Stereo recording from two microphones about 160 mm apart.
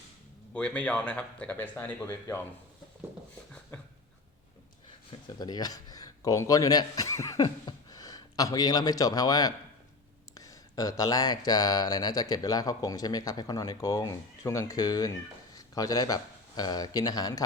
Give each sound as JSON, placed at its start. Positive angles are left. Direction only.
{"t": 0.5, "sound": "speech", "side_deg": 5}
{"t": 3.7, "sound": "a sound", "side_deg": 10}
{"t": 5.4, "sound": "speech", "side_deg": 25}